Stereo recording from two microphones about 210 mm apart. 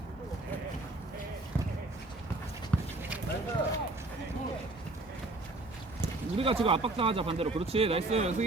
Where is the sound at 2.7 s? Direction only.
5° left (ahead or behind).